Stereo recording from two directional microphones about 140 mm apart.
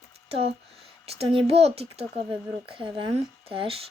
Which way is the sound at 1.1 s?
45° right (ahead or behind).